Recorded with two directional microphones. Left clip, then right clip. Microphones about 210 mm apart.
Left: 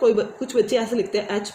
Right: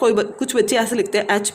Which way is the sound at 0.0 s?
55° right (ahead or behind).